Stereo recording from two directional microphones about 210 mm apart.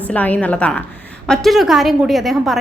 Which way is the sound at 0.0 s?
10° left (ahead or behind).